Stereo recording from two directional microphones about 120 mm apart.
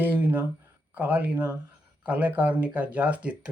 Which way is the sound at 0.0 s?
15° right (ahead or behind).